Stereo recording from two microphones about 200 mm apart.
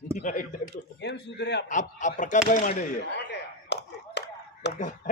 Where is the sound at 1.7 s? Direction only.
40° left (ahead or behind).